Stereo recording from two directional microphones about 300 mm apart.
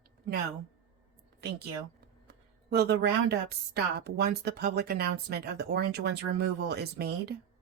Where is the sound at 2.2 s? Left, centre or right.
Right.